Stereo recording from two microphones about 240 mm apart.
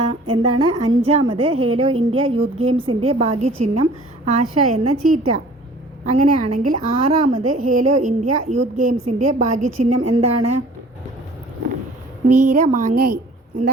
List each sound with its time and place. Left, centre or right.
0.0 s a woman's voice: right
4.9 s a woman's voice: right
6.1 s a woman's voice: right
9.6 s a woman's voice: right
10.1 s a woman's voice: right
12.5 s a woman's voice: right